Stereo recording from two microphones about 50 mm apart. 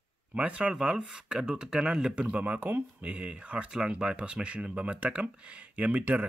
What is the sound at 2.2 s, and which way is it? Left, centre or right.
Speech, right.